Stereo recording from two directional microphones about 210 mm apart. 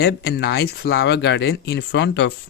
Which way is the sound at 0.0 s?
50° left (ahead or behind).